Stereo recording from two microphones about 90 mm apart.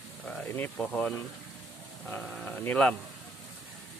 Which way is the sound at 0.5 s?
15° left (ahead or behind).